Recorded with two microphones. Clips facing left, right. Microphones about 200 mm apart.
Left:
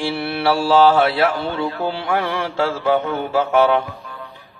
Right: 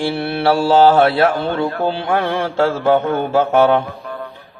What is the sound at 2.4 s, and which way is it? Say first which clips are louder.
Speech: right 4 dB; 55° right (ahead or behind).